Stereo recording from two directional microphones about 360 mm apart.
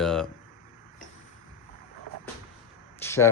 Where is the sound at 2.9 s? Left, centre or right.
Centre.